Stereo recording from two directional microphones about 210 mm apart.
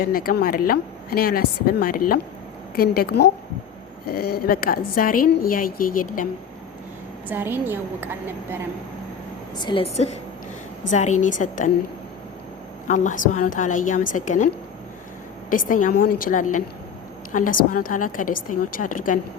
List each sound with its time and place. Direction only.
0.0 s a woman's voice: 45° left (ahead or behind)
7.3 s a woman's voice: 10° right (ahead or behind)
9.6 s a woman's voice: 25° left (ahead or behind)
12.9 s a woman's voice: 35° left (ahead or behind)